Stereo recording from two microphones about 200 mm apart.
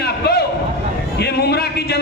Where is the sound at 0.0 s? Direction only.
55° left (ahead or behind).